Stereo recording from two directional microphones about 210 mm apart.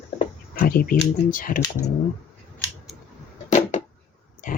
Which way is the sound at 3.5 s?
35° left (ahead or behind).